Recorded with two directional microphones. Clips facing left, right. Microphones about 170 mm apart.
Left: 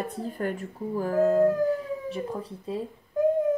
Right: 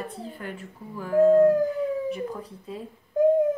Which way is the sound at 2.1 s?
30° left (ahead or behind).